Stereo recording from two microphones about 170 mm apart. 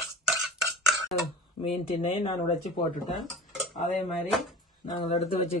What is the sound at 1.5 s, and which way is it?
Speech, 35° left (ahead or behind).